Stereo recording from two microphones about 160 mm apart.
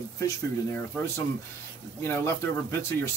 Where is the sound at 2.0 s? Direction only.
15° left (ahead or behind).